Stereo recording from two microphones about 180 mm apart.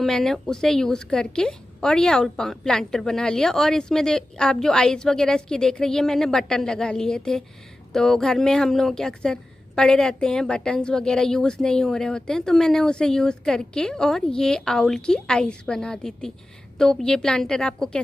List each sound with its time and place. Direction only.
0.0 s speech: centre (ahead or behind)